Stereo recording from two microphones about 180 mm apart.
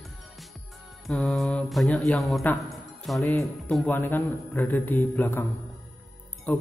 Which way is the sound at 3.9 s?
10° left (ahead or behind).